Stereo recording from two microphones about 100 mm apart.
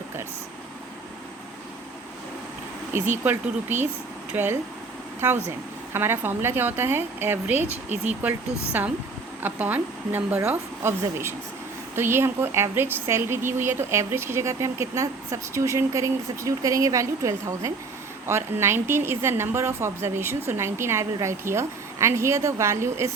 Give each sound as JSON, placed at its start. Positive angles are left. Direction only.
{"t": 2.9, "sound": "a woman's voice", "side_deg": -20}
{"t": 9.4, "sound": "a woman's voice", "side_deg": -20}